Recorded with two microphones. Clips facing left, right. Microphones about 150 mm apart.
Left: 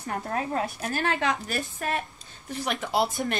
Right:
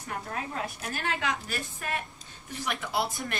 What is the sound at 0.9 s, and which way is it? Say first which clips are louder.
Speech: left 5 dB; 45° left (ahead or behind).